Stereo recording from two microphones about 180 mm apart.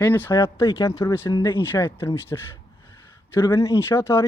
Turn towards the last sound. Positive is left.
turn(degrees=15)  # may be behind; listen again after turning